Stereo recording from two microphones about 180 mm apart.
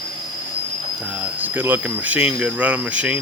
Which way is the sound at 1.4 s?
10° right (ahead or behind).